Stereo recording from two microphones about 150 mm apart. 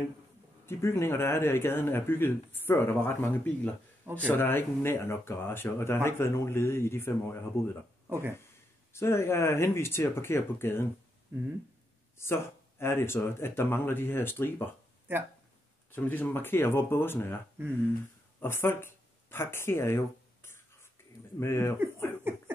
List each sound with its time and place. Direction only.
0.7 s speech: 15° left (ahead or behind)
4.0 s speech: 15° right (ahead or behind)
4.3 s speech: 15° left (ahead or behind)
8.1 s speech: 15° right (ahead or behind)
8.9 s speech: 15° left (ahead or behind)
12.2 s speech: 15° left (ahead or behind)
15.9 s speech: 10° left (ahead or behind)
18.4 s speech: 15° left (ahead or behind)
21.0 s a sound: 15° left (ahead or behind)
21.4 s speech: 15° left (ahead or behind)
22.3 s laughter: 15° right (ahead or behind)